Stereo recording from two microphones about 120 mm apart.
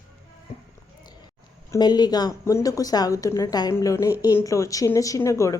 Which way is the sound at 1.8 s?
35° left (ahead or behind).